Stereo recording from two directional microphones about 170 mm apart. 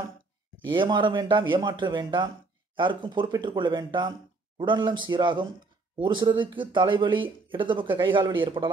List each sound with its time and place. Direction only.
0.7 s speech: 25° right (ahead or behind)